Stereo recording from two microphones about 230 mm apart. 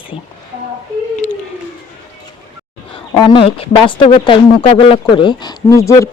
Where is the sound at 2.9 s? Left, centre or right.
Left.